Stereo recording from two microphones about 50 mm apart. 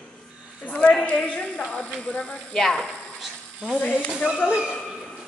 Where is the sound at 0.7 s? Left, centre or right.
Left.